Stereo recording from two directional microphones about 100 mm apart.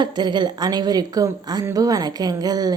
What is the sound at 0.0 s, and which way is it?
A woman's voice, 50° right (ahead or behind).